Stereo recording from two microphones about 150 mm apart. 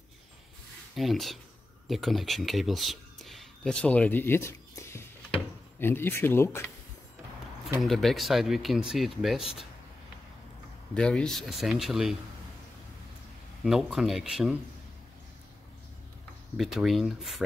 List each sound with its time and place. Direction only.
0.9 s speech: centre (ahead or behind); by 6.6 s 15° left (ahead or behind)
7.8 s speech: centre (ahead or behind)
11.0 s speech: 5° left (ahead or behind)
13.7 s speech: centre (ahead or behind)
16.5 s speech: centre (ahead or behind)